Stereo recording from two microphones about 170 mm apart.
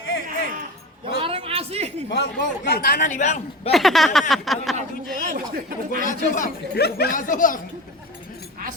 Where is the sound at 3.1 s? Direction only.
45° left (ahead or behind).